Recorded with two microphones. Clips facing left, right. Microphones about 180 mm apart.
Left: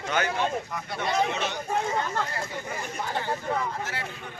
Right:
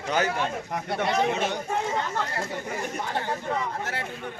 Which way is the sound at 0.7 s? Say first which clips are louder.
Right 3 dB; 55° right (ahead or behind).